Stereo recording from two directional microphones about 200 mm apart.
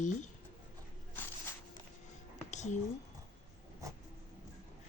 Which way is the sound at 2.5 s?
35° left (ahead or behind).